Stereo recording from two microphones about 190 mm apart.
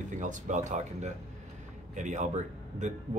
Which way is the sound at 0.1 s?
40° right (ahead or behind).